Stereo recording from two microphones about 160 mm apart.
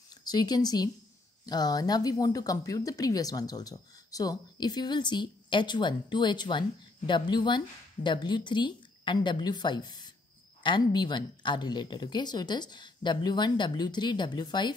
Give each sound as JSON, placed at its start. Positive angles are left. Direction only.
{"t": 0.2, "sound": "speech", "side_deg": 25}